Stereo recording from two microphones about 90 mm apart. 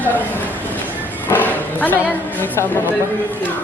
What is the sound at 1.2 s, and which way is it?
A woman's voice, 20° left (ahead or behind).